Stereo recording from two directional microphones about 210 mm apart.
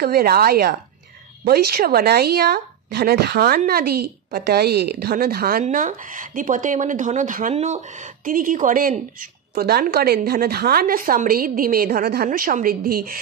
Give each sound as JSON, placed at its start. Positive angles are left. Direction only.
{"t": 0.0, "sound": "speech", "side_deg": -50}